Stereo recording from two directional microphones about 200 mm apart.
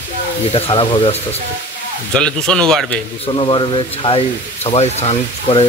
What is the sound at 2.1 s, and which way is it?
Speech, 5° left (ahead or behind).